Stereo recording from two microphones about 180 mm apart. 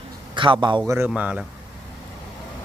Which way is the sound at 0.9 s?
10° right (ahead or behind).